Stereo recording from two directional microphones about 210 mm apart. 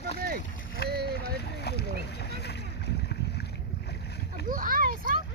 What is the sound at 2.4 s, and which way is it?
Boat, 55° left (ahead or behind).